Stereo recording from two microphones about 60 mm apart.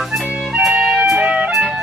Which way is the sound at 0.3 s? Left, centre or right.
Centre.